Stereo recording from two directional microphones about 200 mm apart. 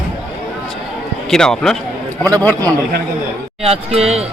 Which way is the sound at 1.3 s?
Centre (ahead or behind).